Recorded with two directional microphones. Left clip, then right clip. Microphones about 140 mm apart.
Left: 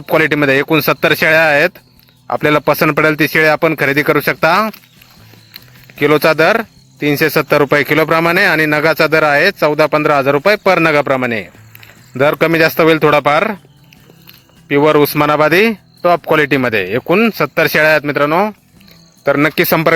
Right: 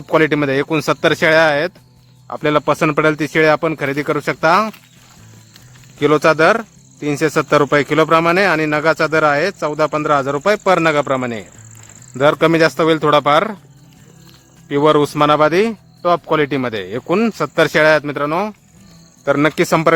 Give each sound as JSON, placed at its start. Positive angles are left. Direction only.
{"t": 0.0, "sound": "speech", "side_deg": 25}
{"t": 6.0, "sound": "speech", "side_deg": 25}
{"t": 14.7, "sound": "speech", "side_deg": 25}
{"t": 19.2, "sound": "speech", "side_deg": 25}